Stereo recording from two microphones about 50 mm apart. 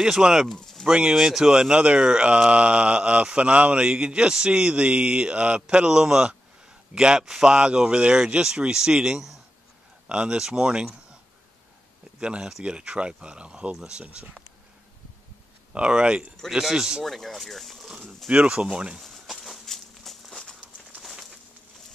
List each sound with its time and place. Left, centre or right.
0.0 s speech: centre
12.2 s speech: centre
14.0 s speech: right
15.7 s speech: centre
17.0 s speech: centre
18.3 s speech: right
19.0 s walk: centre
21.0 s a sound: centre